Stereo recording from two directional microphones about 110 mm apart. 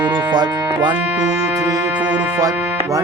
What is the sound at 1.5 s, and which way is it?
Music, 30° right (ahead or behind).